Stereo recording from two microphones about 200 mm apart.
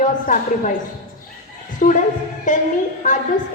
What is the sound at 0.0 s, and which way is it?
Speech, 40° left (ahead or behind).